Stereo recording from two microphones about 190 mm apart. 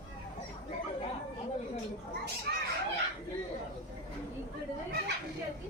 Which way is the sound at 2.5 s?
60° right (ahead or behind).